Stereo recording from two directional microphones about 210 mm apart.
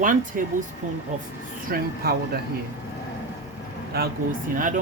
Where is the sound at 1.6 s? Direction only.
45° right (ahead or behind).